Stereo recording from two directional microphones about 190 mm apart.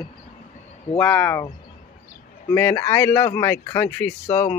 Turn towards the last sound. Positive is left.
turn(degrees=10)  # may be behind; listen again after turning